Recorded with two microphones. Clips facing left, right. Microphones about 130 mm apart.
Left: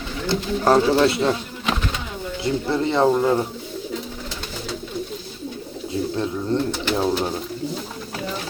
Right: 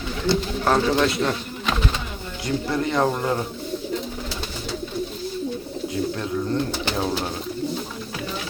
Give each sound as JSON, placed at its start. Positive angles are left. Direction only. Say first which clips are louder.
{"t": 0.6, "sound": "speech", "louder": "left 5 dB", "side_deg": 30}
{"t": 2.4, "sound": "speech", "louder": "left 2 dB", "side_deg": 25}
{"t": 3.1, "sound": "speech", "louder": "left 6 dB", "side_deg": 10}
{"t": 5.9, "sound": "speech", "louder": "left 2 dB", "side_deg": 30}